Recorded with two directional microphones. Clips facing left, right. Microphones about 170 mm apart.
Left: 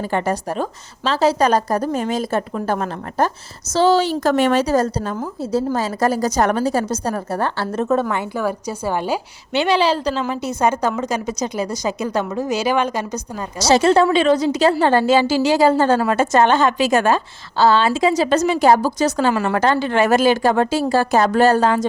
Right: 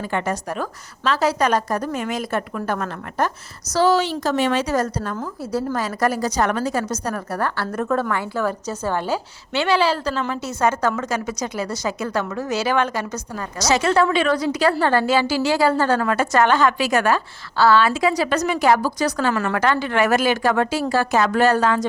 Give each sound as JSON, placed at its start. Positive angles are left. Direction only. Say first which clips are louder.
{"t": 0.1, "sound": "a woman's voice", "louder": "left 3 dB", "side_deg": 30}
{"t": 4.1, "sound": "speech", "louder": "left 4 dB", "side_deg": 55}
{"t": 4.7, "sound": "a woman's voice", "louder": "left 4 dB", "side_deg": 30}
{"t": 6.2, "sound": "a woman's voice", "louder": "left 3 dB", "side_deg": 40}
{"t": 8.1, "sound": "a woman's voice", "louder": "left 1 dB", "side_deg": 10}
{"t": 13.6, "sound": "a woman's voice", "louder": "left 4 dB", "side_deg": 30}